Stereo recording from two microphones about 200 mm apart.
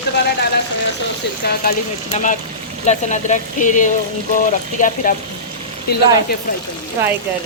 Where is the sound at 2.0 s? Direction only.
35° left (ahead or behind).